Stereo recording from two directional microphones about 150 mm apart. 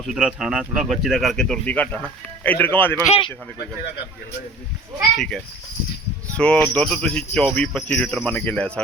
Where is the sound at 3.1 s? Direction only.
35° left (ahead or behind).